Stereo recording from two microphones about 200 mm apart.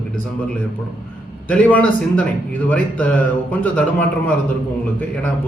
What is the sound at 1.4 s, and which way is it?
Speech, 5° left (ahead or behind).